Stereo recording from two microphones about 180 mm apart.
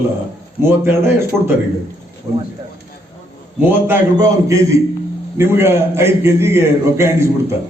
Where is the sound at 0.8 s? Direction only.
15° right (ahead or behind).